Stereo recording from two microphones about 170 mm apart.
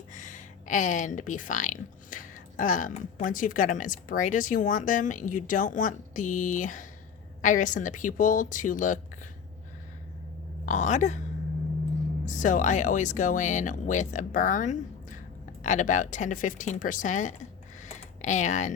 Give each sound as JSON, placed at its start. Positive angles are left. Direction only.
{"t": 0.1, "sound": "speech", "side_deg": 50}
{"t": 10.7, "sound": "speech", "side_deg": 45}
{"t": 12.2, "sound": "speech", "side_deg": 45}
{"t": 17.8, "sound": "computer keyboard", "side_deg": 45}